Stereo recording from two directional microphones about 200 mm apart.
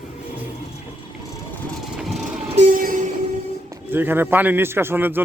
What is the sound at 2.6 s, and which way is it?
Music, 40° right (ahead or behind).